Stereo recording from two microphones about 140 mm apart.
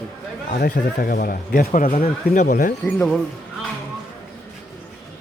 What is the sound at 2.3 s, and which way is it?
Speech, 65° left (ahead or behind).